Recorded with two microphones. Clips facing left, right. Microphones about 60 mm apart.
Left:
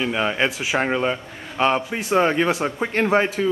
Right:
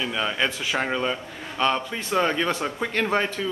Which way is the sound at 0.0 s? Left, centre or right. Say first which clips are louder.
Left 4 dB; left.